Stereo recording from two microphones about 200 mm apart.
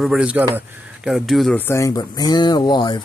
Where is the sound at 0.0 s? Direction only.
5° right (ahead or behind).